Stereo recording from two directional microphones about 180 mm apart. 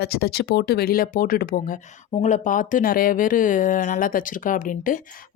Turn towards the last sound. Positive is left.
turn(degrees=50)  # may be behind; listen again after turning